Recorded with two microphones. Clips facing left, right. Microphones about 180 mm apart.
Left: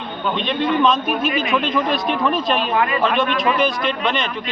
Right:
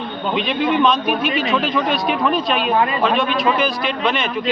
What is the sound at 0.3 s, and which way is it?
A man's voice, 5° right (ahead or behind).